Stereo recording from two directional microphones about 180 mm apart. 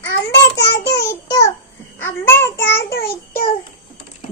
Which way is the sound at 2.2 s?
10° left (ahead or behind).